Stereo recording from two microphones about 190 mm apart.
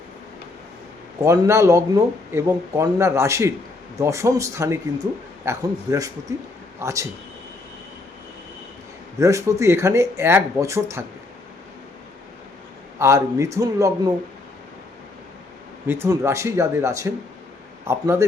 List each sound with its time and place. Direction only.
1.2 s speech: 15° right (ahead or behind)
9.1 s speech: 15° right (ahead or behind)
13.0 s speech: 15° right (ahead or behind)
15.9 s speech: 15° right (ahead or behind)